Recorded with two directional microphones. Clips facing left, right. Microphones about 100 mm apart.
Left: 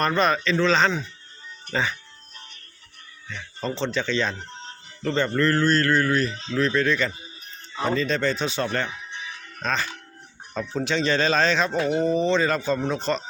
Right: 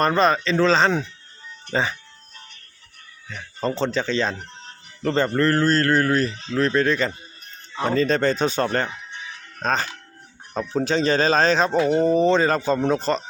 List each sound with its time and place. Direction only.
0.0 s speech: 30° right (ahead or behind)
3.6 s speech: 35° right (ahead or behind)
8.9 s music: centre (ahead or behind)
9.6 s speech: 40° right (ahead or behind)